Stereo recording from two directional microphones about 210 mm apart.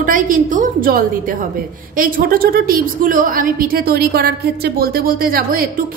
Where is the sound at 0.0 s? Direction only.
40° right (ahead or behind).